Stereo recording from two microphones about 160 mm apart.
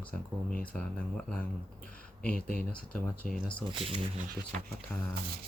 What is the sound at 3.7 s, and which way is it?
Speech, 35° right (ahead or behind).